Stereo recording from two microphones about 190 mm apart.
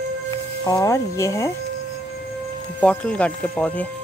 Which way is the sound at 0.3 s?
15° left (ahead or behind).